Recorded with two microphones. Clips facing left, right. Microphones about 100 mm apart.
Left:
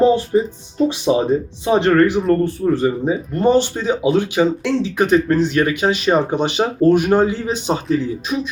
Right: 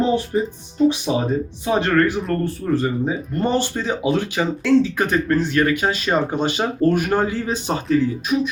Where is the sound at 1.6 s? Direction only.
20° left (ahead or behind).